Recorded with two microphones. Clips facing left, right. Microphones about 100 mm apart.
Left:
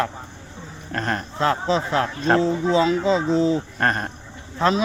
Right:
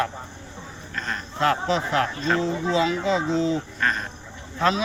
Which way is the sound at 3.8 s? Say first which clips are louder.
Left 3 dB; 55° left (ahead or behind).